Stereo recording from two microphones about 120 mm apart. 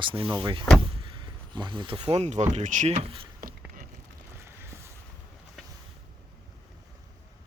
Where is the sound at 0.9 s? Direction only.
45° right (ahead or behind); by 2.4 s 70° right (ahead or behind).